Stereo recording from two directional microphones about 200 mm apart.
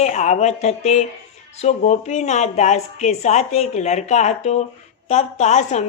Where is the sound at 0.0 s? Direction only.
35° left (ahead or behind).